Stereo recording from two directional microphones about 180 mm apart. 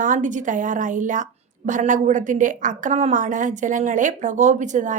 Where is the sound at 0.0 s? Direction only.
45° right (ahead or behind).